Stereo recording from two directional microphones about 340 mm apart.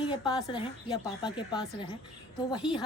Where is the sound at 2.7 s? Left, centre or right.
Centre.